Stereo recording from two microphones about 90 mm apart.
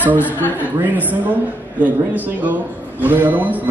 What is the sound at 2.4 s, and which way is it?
A man's voice, 20° right (ahead or behind).